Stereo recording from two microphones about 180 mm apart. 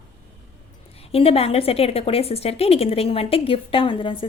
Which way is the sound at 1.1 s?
35° left (ahead or behind).